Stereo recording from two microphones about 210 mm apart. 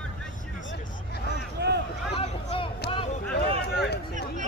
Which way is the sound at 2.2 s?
25° left (ahead or behind).